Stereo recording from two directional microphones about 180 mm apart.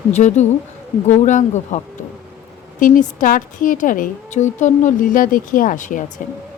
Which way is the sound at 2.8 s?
45° left (ahead or behind).